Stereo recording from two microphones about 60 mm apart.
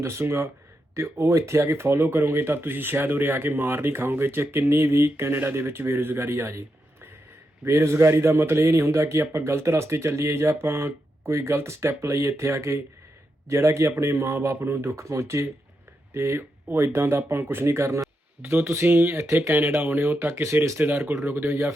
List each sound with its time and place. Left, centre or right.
0.0 s a man's voice: right
20.7 s a man's voice: right